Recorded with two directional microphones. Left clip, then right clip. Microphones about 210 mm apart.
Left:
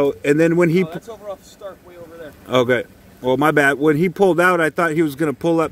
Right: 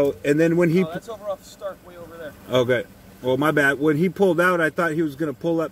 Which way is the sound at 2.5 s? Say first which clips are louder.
Left 3 dB; 50° left (ahead or behind).